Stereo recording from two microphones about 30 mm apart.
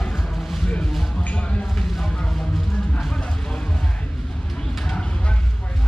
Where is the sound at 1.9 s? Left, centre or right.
Centre.